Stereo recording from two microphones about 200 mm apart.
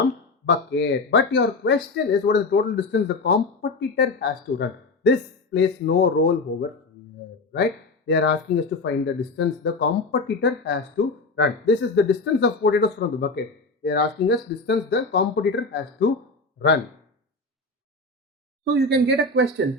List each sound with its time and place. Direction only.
0.4 s speech: 60° left (ahead or behind)
8.0 s speech: 60° left (ahead or behind)
18.9 s speech: 55° right (ahead or behind)